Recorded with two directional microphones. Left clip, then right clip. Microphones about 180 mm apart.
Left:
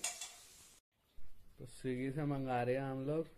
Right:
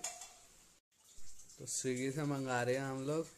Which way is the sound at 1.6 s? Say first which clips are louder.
Right 3 dB; 10° right (ahead or behind).